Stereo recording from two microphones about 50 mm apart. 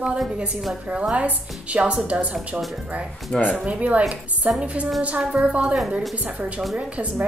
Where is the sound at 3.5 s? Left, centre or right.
Right.